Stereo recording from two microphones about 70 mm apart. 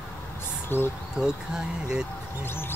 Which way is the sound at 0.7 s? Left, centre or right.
Left.